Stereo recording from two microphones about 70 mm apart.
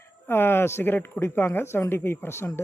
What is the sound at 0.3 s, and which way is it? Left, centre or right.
A man's voice, left.